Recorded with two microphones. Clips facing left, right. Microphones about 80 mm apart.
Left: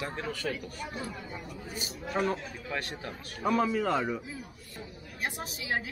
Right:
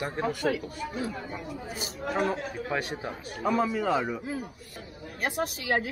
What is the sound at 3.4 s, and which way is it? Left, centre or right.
Speech, centre.